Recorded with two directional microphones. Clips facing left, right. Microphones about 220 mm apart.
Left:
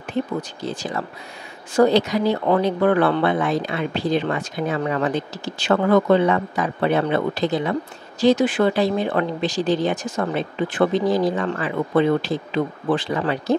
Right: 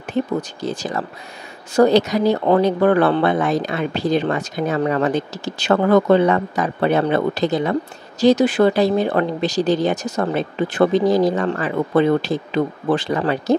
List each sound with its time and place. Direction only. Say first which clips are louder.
0.4 s speech: right 3 dB; 40° right (ahead or behind)